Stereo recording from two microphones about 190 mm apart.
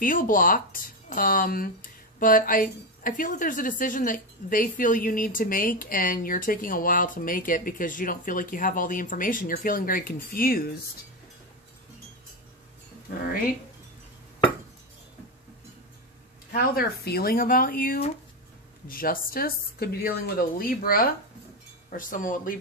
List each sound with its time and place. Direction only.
0.0 s speech: 45° left (ahead or behind)
16.6 s speech: 55° left (ahead or behind)